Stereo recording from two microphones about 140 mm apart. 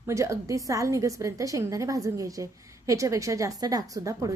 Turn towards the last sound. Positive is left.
turn(degrees=-25)  # may be behind; listen again after turning